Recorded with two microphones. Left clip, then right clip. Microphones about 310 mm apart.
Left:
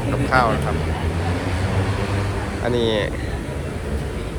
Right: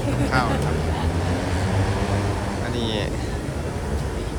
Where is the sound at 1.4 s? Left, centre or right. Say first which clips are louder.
Left 1 dB; right.